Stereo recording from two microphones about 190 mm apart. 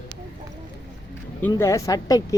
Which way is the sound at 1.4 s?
15° left (ahead or behind).